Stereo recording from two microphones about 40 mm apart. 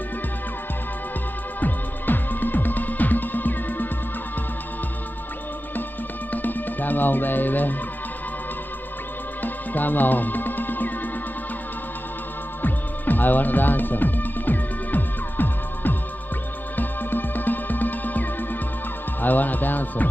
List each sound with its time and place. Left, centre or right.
1.6 s music: left
6.3 s music: left
9.4 s music: left
12.6 s music: left